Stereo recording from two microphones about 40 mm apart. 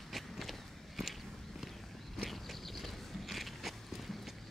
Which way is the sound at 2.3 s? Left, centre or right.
Centre.